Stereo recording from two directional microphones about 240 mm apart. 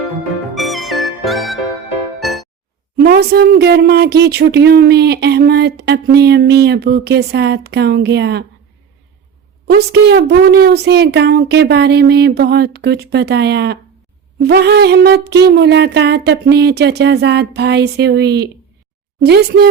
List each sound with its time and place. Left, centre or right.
0.5 s music: centre
3.0 s speech: right
9.6 s speech: right